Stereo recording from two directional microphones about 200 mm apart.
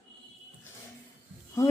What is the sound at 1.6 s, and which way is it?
Speech, 15° left (ahead or behind).